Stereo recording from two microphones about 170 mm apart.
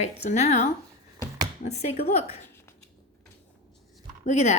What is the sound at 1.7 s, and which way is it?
Speech, 40° left (ahead or behind).